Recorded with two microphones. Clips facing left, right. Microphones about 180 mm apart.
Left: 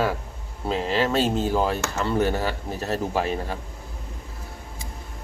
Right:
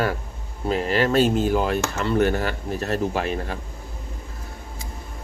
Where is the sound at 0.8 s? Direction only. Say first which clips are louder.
Right 3 dB; 25° left (ahead or behind).